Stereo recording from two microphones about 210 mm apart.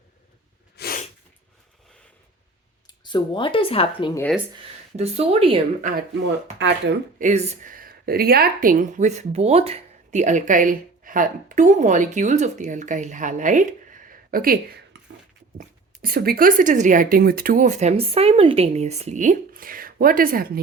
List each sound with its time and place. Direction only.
0.8 s sneeze: 45° left (ahead or behind)
2.8 s speech: 20° left (ahead or behind)
4.9 s speech: 30° right (ahead or behind)
6.6 s speech: 55° right (ahead or behind)
7.2 s speech: 35° right (ahead or behind)